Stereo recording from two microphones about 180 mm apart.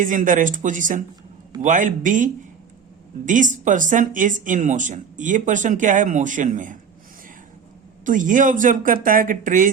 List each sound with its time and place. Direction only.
0.0 s speech: 45° right (ahead or behind)
8.0 s speech: 45° right (ahead or behind)